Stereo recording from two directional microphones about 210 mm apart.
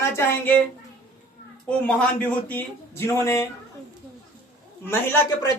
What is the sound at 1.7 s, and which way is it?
A man's voice, 5° left (ahead or behind).